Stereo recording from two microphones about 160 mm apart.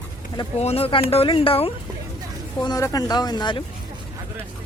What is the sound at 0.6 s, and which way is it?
Speech, 40° left (ahead or behind).